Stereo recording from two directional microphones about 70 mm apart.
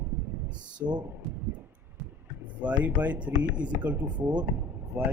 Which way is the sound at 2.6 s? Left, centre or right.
Right.